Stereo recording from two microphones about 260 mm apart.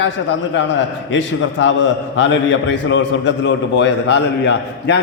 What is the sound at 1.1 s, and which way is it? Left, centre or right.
A man's voice, left.